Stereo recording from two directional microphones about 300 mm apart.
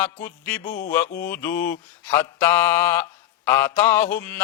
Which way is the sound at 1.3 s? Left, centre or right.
Centre.